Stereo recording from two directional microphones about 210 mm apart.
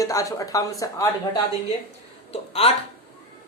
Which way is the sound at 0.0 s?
15° left (ahead or behind).